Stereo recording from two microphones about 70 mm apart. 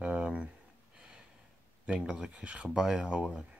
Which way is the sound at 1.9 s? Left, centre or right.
Centre.